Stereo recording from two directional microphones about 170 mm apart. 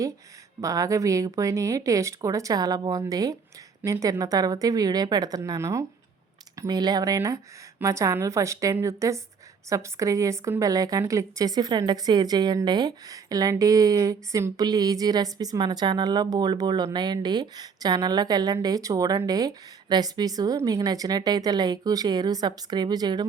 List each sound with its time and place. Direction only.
0.6 s a woman's voice: 20° right (ahead or behind)